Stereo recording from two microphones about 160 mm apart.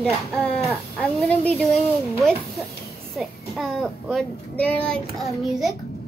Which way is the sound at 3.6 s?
Centre (ahead or behind).